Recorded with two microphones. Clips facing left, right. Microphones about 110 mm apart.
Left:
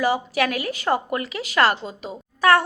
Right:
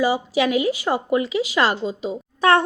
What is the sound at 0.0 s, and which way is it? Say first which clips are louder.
Speech: right 2 dB; 15° right (ahead or behind).